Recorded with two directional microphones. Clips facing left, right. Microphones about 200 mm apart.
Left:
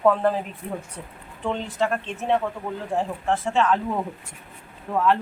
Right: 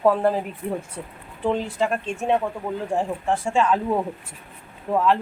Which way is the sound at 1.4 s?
10° right (ahead or behind).